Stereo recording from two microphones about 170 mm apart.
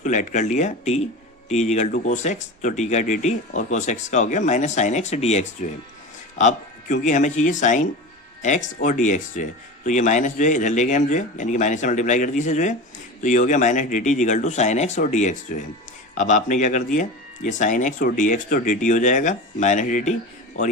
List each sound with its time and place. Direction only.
0.0 s speech: 45° left (ahead or behind)